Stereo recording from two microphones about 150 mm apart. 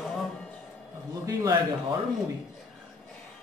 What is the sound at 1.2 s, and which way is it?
Speech, 25° right (ahead or behind).